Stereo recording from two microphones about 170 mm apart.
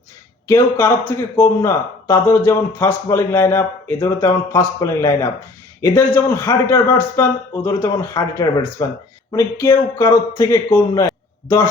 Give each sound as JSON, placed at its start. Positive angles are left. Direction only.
{"t": 0.4, "sound": "speech", "side_deg": 15}